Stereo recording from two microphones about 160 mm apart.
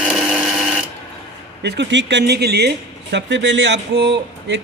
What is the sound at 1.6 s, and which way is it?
Speech, 90° right.